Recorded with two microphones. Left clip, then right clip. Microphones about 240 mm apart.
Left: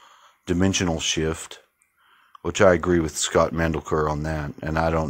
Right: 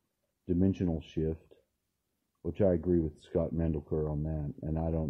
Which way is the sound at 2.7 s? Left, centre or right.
Left.